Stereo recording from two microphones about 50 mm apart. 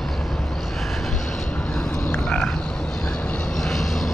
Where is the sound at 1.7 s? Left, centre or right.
Centre.